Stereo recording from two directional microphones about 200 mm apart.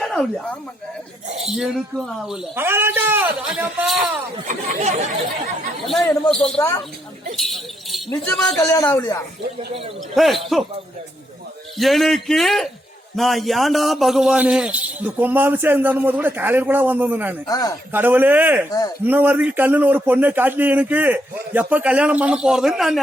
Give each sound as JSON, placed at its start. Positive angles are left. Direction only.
{"t": 0.0, "sound": "speech", "side_deg": 0}
{"t": 1.3, "sound": "speech", "side_deg": -30}
{"t": 1.5, "sound": "speech", "side_deg": 0}
{"t": 4.4, "sound": "speech", "side_deg": -40}
{"t": 5.8, "sound": "speech", "side_deg": 0}
{"t": 7.3, "sound": "a sound", "side_deg": 0}
{"t": 8.2, "sound": "speech", "side_deg": 5}
{"t": 8.7, "sound": "speech", "side_deg": 15}
{"t": 10.2, "sound": "speech", "side_deg": 0}
{"t": 11.8, "sound": "a man's voice", "side_deg": 0}
{"t": 17.4, "sound": "speech", "side_deg": 20}
{"t": 17.9, "sound": "a man's voice", "side_deg": -10}